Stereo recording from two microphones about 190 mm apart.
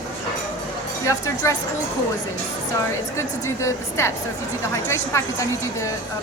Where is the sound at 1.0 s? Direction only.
15° left (ahead or behind).